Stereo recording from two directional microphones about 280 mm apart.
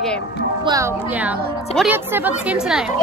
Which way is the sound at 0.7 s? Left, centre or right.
Centre.